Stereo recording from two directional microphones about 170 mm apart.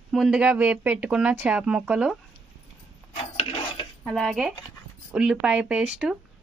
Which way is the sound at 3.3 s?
35° left (ahead or behind).